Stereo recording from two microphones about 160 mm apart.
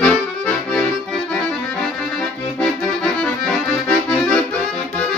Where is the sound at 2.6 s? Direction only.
5° left (ahead or behind).